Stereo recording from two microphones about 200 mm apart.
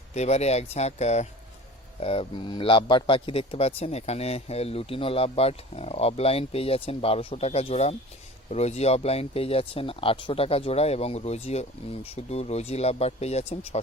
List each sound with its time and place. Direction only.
0.1 s speech: 35° left (ahead or behind)